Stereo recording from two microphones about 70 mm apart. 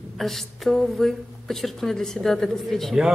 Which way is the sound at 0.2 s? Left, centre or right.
Centre.